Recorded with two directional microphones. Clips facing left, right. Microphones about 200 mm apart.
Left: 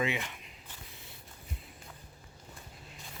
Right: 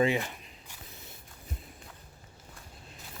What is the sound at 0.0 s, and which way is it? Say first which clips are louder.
Speech: right 6 dB; 40° right (ahead or behind).